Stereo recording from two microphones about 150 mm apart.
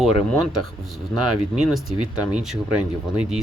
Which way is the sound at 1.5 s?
Centre (ahead or behind).